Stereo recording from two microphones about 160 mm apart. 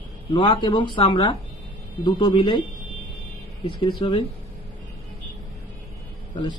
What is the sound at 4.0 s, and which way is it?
Speech, 30° left (ahead or behind).